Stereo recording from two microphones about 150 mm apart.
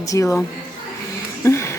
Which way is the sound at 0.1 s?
20° left (ahead or behind).